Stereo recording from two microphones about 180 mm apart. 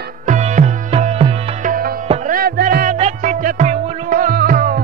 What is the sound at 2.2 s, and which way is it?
Music, 55° right (ahead or behind).